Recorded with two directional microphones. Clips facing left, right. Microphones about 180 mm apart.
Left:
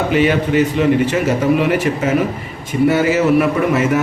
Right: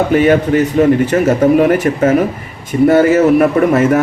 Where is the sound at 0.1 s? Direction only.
50° right (ahead or behind).